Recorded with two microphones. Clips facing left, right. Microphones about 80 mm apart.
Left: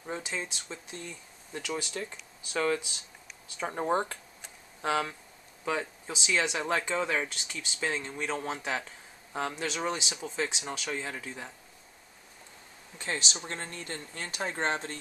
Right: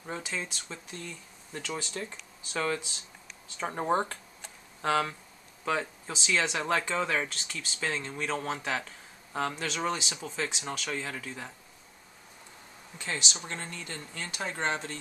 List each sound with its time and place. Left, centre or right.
0.1 s speech: centre
2.0 s speech: centre
4.1 s tick: centre
5.7 s a man's voice: centre
12.9 s speech: left